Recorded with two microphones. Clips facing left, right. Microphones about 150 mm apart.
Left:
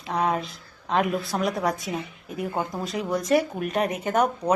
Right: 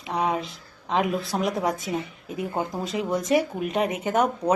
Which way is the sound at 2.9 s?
10° right (ahead or behind).